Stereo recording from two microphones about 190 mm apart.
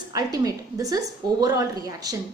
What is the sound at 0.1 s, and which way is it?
A woman's voice, 20° right (ahead or behind).